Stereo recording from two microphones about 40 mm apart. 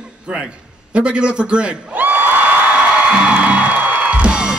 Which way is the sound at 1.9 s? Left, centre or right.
Right.